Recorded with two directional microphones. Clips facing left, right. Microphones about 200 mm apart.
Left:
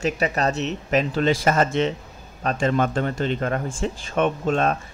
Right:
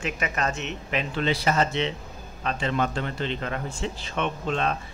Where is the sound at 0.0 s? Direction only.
35° left (ahead or behind).